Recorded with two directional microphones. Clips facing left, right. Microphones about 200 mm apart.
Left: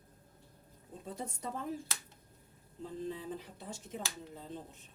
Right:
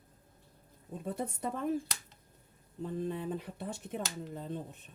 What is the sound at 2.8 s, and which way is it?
Speech, 60° right (ahead or behind).